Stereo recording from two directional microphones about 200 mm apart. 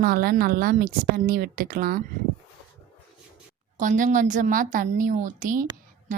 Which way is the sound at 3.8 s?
40° right (ahead or behind).